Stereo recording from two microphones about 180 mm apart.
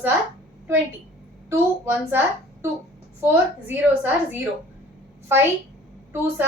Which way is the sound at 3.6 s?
10° right (ahead or behind).